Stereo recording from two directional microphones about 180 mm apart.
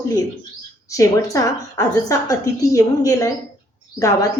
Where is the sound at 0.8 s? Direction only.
20° left (ahead or behind).